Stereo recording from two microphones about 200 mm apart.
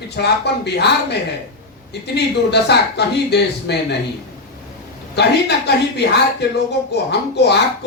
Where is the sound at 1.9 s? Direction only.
55° left (ahead or behind).